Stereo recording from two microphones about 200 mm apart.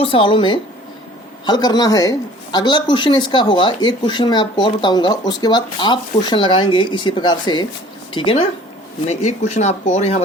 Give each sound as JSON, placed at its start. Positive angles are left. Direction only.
{"t": 0.0, "sound": "speech", "side_deg": 25}